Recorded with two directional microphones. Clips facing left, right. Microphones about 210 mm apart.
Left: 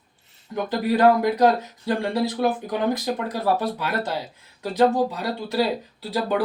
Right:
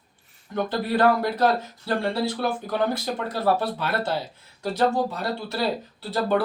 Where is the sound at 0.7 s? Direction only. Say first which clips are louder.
Left 4 dB; 15° left (ahead or behind).